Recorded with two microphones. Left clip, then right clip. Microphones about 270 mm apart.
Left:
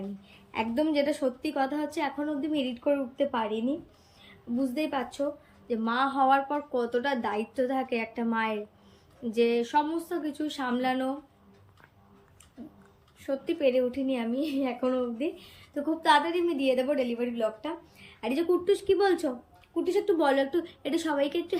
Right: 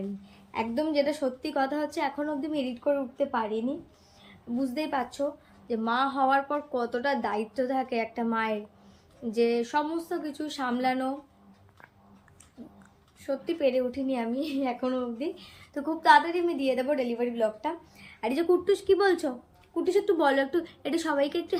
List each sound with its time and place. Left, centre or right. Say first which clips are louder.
0.5 s a woman's voice: even; centre
13.2 s a woman's voice: even; centre